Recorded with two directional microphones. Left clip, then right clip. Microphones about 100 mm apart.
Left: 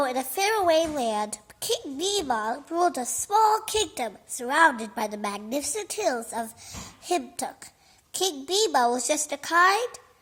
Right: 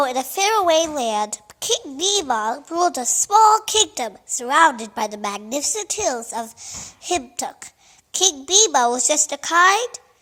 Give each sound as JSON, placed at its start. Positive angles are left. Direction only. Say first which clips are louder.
{"t": 0.0, "sound": "a woman's voice", "louder": "right 6 dB", "side_deg": -15}